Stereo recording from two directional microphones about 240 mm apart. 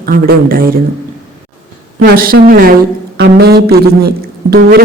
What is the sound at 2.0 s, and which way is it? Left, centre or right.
Speech, right.